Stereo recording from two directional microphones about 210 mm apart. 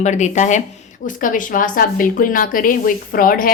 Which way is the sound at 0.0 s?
35° left (ahead or behind).